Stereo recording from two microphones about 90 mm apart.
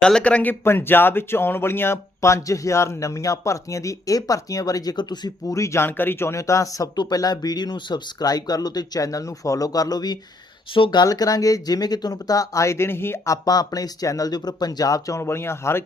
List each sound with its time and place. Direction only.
0.0 s speech: 10° left (ahead or behind)
0.6 s speech: 25° left (ahead or behind); by 5.3 s 50° left (ahead or behind)
5.5 s speech: 35° left (ahead or behind)
10.8 s speech: 70° left (ahead or behind)
11.0 s speech: 45° left (ahead or behind)